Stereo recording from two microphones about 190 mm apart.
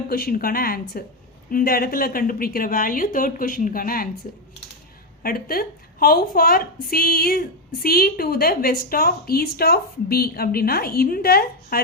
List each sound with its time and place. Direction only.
0.1 s a woman's voice: 50° left (ahead or behind)
5.2 s a woman's voice: 50° left (ahead or behind)